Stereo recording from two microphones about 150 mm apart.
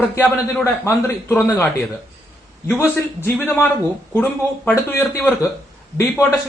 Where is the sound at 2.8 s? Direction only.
15° left (ahead or behind).